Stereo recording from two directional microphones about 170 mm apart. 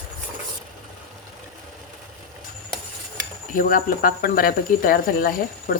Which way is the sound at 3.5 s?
55° left (ahead or behind).